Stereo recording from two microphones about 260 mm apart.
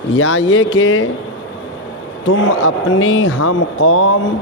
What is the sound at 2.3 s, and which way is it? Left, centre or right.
A man's voice, left.